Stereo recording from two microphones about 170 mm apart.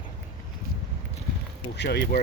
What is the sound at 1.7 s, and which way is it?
Speech, 80° left.